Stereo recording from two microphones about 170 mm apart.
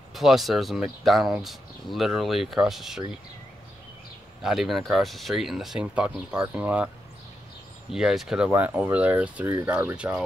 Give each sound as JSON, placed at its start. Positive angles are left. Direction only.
{"t": 0.1, "sound": "speech", "side_deg": 0}
{"t": 4.4, "sound": "speech", "side_deg": 0}
{"t": 7.9, "sound": "speech", "side_deg": -5}